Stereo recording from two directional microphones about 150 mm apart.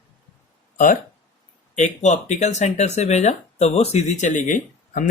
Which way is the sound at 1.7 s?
50° left (ahead or behind).